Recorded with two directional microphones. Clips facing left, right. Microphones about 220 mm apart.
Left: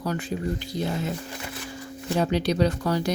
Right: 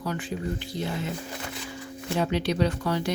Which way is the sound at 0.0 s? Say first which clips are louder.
Left 3 dB; 40° left (ahead or behind).